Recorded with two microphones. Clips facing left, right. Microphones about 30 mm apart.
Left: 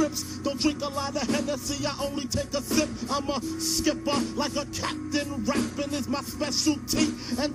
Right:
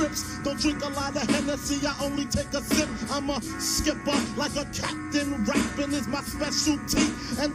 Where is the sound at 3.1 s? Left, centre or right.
Centre.